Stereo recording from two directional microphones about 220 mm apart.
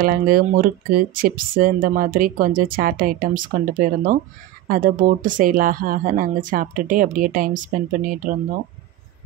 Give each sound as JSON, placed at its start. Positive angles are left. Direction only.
{"t": 0.0, "sound": "speech", "side_deg": -40}